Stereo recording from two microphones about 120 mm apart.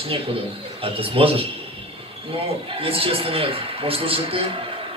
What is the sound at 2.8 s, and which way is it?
A man's voice, 50° right (ahead or behind).